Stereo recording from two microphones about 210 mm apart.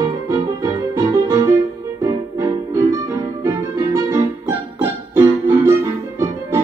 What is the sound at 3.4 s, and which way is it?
Music, 15° right (ahead or behind).